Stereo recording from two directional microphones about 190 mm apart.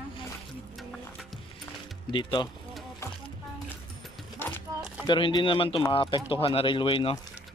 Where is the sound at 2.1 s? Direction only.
25° left (ahead or behind).